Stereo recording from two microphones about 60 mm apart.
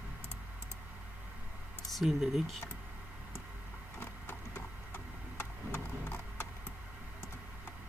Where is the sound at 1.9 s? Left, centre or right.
Centre.